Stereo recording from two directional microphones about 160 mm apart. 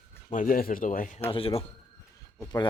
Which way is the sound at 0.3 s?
60° left (ahead or behind).